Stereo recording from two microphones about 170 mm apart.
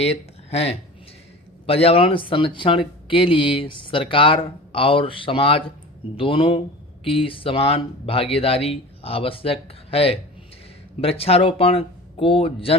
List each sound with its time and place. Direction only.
0.0 s speech: 35° left (ahead or behind)